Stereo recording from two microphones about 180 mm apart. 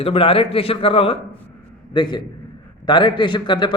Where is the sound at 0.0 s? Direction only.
30° left (ahead or behind).